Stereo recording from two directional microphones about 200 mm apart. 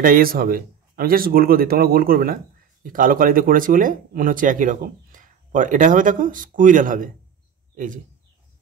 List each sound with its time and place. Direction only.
0.0 s speech: 45° right (ahead or behind)